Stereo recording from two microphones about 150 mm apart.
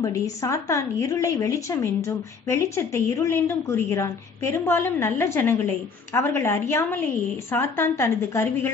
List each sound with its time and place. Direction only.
0.0 s a woman's voice: 20° left (ahead or behind)